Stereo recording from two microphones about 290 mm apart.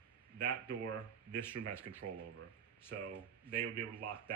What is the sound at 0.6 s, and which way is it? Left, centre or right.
Speech, right.